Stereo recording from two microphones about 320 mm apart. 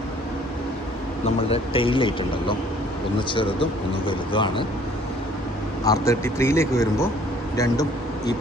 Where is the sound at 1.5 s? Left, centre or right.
Centre.